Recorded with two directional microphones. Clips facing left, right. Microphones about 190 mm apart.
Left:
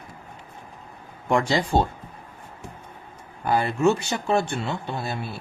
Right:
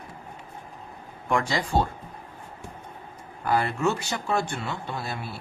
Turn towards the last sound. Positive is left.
turn(degrees=25)  # may be behind; listen again after turning